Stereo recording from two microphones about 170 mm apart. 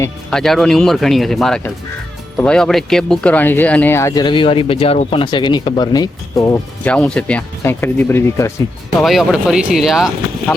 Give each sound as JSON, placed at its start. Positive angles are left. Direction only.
{"t": 0.3, "sound": "speech", "side_deg": 0}
{"t": 9.0, "sound": "speech", "side_deg": 0}